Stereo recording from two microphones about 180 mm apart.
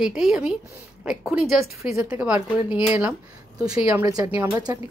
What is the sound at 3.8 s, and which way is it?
Speech, 15° right (ahead or behind).